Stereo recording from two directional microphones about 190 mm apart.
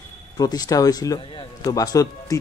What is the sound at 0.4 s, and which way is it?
A man's voice, 20° left (ahead or behind).